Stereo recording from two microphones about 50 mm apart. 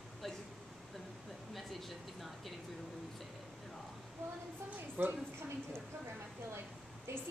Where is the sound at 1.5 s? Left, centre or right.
Centre.